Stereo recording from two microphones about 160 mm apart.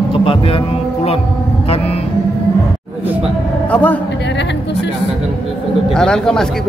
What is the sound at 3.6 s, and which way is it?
Speech, 10° left (ahead or behind).